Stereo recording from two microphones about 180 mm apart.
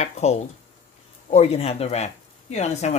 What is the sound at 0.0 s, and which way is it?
Speech, 35° left (ahead or behind).